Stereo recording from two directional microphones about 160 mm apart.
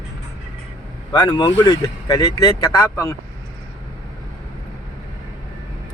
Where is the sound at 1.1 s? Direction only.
25° left (ahead or behind).